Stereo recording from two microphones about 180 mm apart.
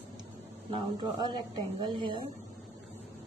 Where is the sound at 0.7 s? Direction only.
30° right (ahead or behind).